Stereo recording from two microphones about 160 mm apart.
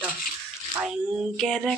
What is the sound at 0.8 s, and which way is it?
Speech, 5° right (ahead or behind).